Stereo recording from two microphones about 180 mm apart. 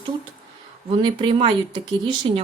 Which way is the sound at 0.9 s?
25° right (ahead or behind).